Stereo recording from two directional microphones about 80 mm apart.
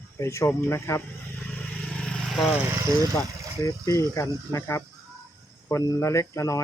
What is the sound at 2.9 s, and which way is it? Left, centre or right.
Speech, right.